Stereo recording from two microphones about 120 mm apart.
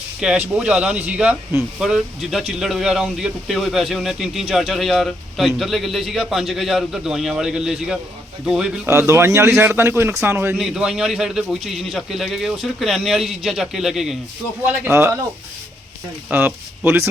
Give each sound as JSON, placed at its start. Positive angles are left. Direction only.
{"t": 0.2, "sound": "speech", "side_deg": -10}
{"t": 8.9, "sound": "a man's voice", "side_deg": -25}
{"t": 10.6, "sound": "speech", "side_deg": -5}
{"t": 14.6, "sound": "a man's voice", "side_deg": -15}
{"t": 16.3, "sound": "a man's voice", "side_deg": -20}